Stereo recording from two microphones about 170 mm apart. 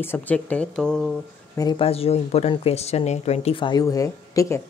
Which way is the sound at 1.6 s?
30° left (ahead or behind).